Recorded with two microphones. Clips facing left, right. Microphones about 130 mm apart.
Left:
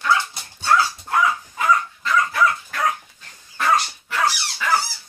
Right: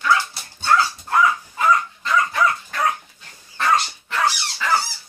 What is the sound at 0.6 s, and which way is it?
Dog, 5° left (ahead or behind).